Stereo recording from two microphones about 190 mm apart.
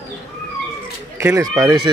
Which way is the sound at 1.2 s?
15° right (ahead or behind).